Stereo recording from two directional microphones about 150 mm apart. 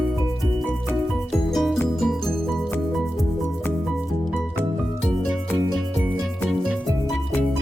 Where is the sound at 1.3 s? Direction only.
Centre (ahead or behind).